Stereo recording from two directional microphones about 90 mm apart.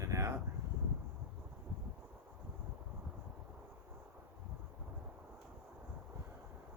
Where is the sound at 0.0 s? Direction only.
35° right (ahead or behind).